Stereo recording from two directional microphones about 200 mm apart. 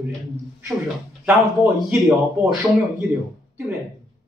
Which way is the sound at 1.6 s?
Centre (ahead or behind).